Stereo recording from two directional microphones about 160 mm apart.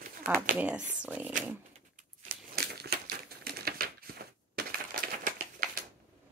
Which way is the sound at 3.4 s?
70° right (ahead or behind).